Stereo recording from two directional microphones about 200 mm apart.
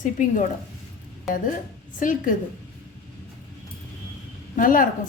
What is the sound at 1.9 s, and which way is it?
Speech, 40° left (ahead or behind).